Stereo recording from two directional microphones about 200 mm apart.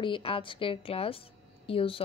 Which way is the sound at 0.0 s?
25° left (ahead or behind).